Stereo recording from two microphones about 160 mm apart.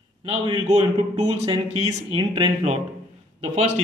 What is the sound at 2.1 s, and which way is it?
Speech, 30° right (ahead or behind).